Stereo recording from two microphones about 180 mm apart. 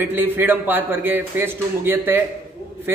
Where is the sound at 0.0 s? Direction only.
10° right (ahead or behind).